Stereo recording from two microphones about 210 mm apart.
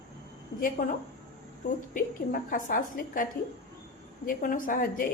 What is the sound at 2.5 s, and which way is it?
A woman's voice, 40° left (ahead or behind).